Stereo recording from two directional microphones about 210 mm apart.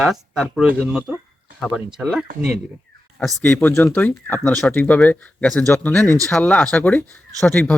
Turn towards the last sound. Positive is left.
turn(degrees=5)  # may be behind; listen again after turning